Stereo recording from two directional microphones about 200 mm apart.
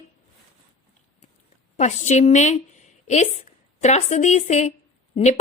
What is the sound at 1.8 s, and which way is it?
A woman's voice, 35° left (ahead or behind).